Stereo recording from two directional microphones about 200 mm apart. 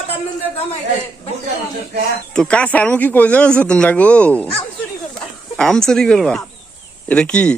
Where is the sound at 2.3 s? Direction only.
5° left (ahead or behind).